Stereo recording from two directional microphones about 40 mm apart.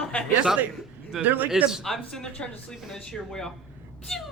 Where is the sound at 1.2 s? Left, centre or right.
Right.